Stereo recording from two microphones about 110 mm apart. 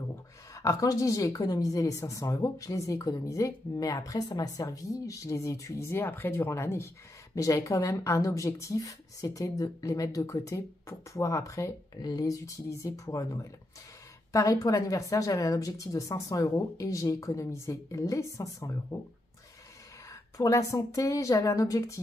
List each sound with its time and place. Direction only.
0.6 s a woman's voice: 30° left (ahead or behind)
20.1 s a woman's voice: 30° left (ahead or behind)